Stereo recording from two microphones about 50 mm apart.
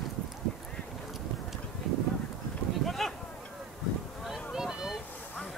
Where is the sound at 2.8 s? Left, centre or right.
Centre.